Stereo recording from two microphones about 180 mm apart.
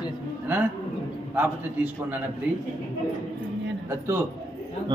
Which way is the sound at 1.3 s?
10° right (ahead or behind).